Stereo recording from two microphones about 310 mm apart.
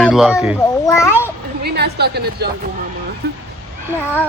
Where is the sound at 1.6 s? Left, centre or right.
Right.